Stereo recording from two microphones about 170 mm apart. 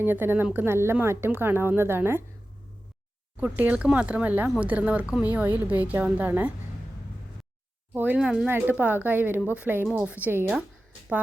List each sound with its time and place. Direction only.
0.0 s speech: 10° right (ahead or behind)
3.4 s speech: 10° right (ahead or behind)
7.9 s speech: 10° right (ahead or behind)